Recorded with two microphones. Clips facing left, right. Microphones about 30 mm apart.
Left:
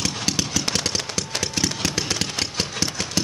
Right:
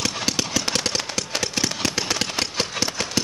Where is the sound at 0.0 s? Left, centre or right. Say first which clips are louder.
Even; centre.